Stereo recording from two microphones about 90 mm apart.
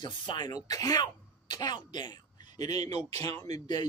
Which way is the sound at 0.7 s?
45° left (ahead or behind).